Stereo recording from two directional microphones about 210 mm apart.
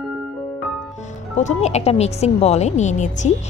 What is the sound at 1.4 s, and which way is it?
Speech, 30° left (ahead or behind).